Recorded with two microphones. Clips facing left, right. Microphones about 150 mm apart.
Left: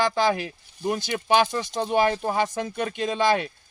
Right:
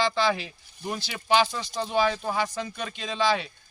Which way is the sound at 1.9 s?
55° left (ahead or behind).